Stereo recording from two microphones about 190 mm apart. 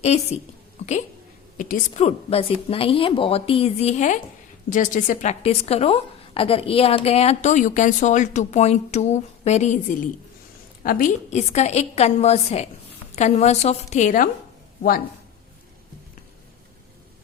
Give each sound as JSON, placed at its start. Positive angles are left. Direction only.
{"t": 0.8, "sound": "speech", "side_deg": 35}
{"t": 1.5, "sound": "a woman's voice", "side_deg": 45}